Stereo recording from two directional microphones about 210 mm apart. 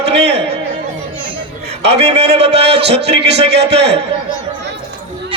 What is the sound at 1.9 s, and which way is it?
Speech, 30° right (ahead or behind).